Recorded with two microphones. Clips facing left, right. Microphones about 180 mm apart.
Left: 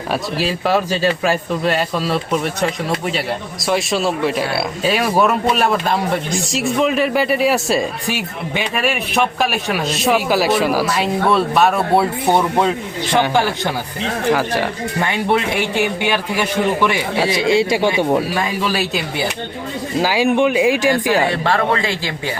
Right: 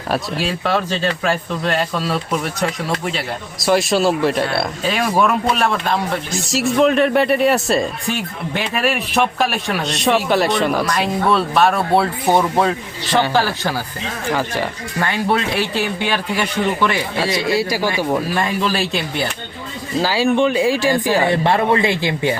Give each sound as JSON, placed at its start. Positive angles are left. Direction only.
{"t": 0.1, "sound": "speech", "side_deg": 0}
{"t": 17.2, "sound": "a man's voice", "side_deg": 25}
{"t": 18.3, "sound": "speech", "side_deg": 0}
{"t": 21.2, "sound": "speech", "side_deg": -20}